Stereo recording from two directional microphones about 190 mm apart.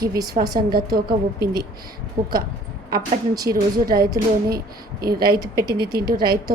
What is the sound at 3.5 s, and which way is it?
Speech, 50° right (ahead or behind).